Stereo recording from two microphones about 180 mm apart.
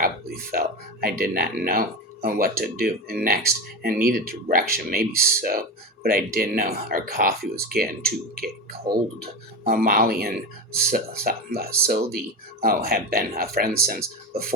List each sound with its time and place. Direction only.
0.0 s speech: 55° right (ahead or behind)